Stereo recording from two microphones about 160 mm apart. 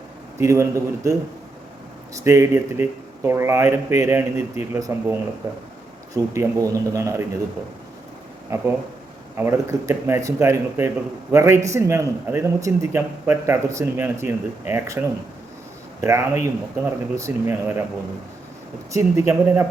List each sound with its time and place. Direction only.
0.3 s speech: 15° right (ahead or behind)
2.1 s speech: 20° right (ahead or behind)
6.3 s speech: 20° right (ahead or behind)
8.5 s speech: 15° right (ahead or behind)
18.9 s speech: 20° right (ahead or behind)